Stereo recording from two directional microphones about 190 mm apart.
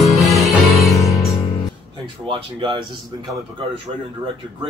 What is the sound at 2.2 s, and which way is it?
Speech, 25° right (ahead or behind).